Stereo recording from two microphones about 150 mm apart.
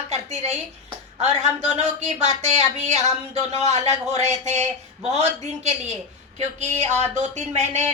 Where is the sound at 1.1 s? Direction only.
45° right (ahead or behind).